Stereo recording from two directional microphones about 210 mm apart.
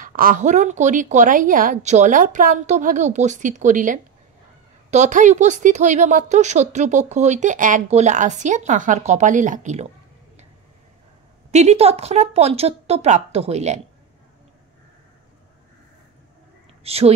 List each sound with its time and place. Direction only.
0.0 s a woman's voice: 40° right (ahead or behind)
11.5 s speech: 30° right (ahead or behind)
16.8 s a woman's voice: 30° right (ahead or behind)